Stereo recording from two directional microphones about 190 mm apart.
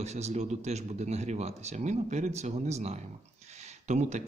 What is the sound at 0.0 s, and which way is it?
Speech, 35° right (ahead or behind).